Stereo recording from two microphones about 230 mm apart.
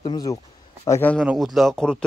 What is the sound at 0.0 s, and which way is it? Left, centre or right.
Speech, centre.